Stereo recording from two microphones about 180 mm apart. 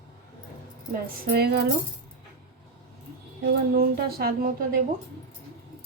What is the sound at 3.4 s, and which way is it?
Speech, 60° right (ahead or behind).